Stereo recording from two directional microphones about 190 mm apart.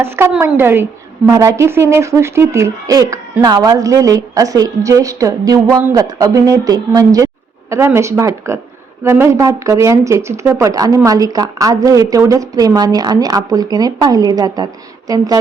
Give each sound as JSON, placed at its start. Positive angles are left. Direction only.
{"t": 0.0, "sound": "a woman's voice", "side_deg": -10}